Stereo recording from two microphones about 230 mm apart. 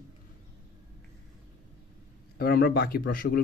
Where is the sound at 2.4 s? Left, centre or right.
Left.